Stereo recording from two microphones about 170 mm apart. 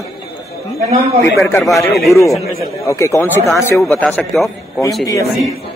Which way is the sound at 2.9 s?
15° left (ahead or behind).